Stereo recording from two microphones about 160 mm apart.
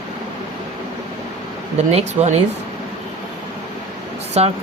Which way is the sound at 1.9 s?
40° right (ahead or behind).